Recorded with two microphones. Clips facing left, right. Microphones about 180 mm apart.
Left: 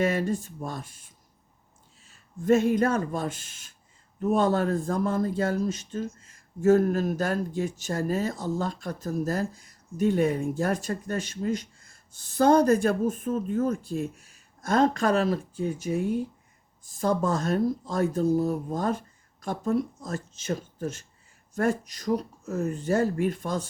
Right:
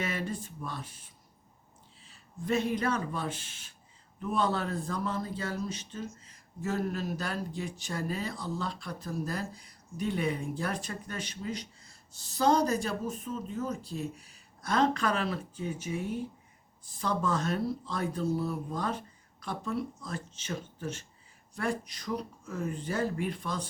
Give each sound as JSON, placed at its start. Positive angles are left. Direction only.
{"t": 0.0, "sound": "speech", "side_deg": 45}